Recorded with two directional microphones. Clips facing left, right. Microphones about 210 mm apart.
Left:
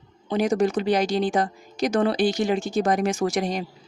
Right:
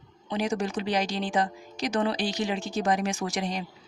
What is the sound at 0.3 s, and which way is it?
Speech, 45° left (ahead or behind).